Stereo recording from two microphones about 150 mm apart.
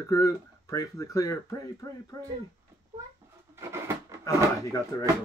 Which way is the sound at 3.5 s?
15° right (ahead or behind).